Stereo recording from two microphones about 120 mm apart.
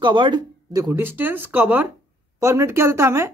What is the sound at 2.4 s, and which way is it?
Speech, 25° right (ahead or behind).